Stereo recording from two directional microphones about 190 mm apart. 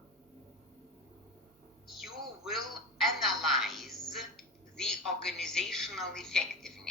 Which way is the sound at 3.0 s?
Centre (ahead or behind).